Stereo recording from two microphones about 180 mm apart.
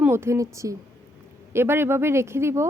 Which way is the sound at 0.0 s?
15° right (ahead or behind).